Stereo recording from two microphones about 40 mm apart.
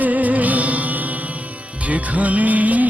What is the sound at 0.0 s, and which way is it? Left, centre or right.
Music, right.